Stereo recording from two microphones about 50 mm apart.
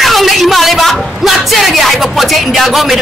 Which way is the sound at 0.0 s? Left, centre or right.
Centre.